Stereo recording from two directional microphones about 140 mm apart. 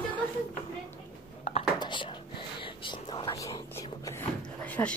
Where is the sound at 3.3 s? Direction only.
25° left (ahead or behind).